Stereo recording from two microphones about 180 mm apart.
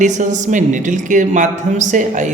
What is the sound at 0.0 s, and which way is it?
A man's voice, 45° right (ahead or behind).